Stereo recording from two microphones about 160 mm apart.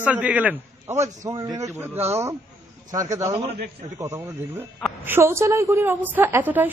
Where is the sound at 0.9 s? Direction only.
20° right (ahead or behind).